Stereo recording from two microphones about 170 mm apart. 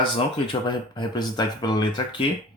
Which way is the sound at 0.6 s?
25° left (ahead or behind).